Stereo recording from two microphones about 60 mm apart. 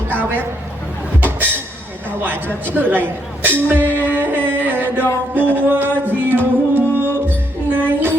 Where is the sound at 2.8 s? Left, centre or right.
Right.